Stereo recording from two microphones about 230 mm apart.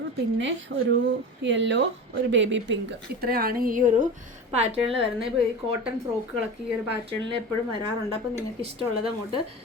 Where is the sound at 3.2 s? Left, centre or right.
Right.